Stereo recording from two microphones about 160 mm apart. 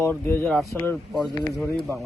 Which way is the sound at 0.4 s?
Centre (ahead or behind).